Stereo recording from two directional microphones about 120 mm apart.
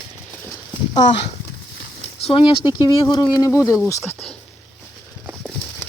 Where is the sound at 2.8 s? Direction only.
35° left (ahead or behind).